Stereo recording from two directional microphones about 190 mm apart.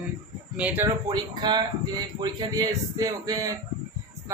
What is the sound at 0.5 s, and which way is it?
Speech, 5° right (ahead or behind).